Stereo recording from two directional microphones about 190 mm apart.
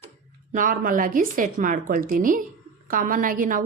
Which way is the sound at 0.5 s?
45° right (ahead or behind).